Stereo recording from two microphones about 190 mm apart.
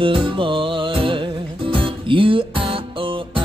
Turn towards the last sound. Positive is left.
turn(degrees=-25)  # may be behind; listen again after turning